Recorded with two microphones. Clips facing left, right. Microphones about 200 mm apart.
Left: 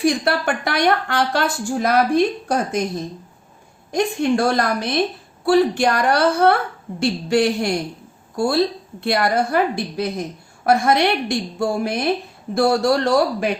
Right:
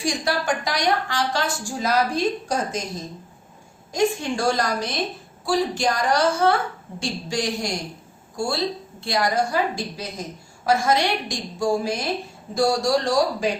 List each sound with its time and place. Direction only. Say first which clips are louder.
0.0 s a woman's voice: left 6 dB; 60° left (ahead or behind)
3.9 s a woman's voice: left 4 dB; 60° left (ahead or behind)